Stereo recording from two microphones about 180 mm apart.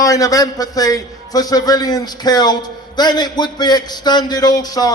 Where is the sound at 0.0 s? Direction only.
20° left (ahead or behind).